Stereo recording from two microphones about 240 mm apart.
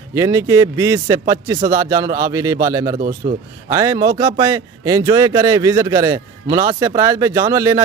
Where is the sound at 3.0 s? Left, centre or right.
Right.